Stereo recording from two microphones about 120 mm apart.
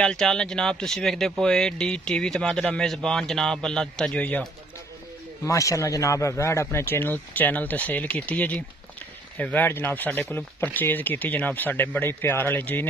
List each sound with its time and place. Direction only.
0.0 s speech: 5° left (ahead or behind)
5.4 s speech: 25° left (ahead or behind)